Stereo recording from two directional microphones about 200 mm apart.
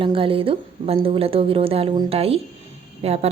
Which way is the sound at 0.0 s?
25° right (ahead or behind).